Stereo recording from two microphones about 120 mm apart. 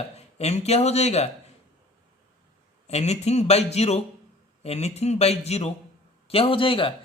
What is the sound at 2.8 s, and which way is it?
Speech, 65° left (ahead or behind).